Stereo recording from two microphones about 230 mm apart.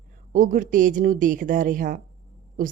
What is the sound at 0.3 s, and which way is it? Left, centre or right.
Speech, right.